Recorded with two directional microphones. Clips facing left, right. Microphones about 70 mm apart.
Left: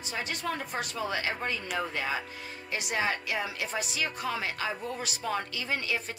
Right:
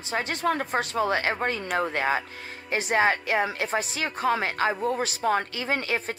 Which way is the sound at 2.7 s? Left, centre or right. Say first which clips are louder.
Right 8 dB; right.